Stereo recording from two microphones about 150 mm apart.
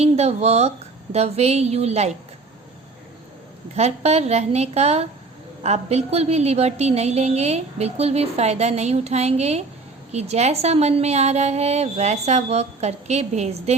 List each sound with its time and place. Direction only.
0.0 s a woman's voice: 45° right (ahead or behind)
3.8 s a woman's voice: 45° right (ahead or behind)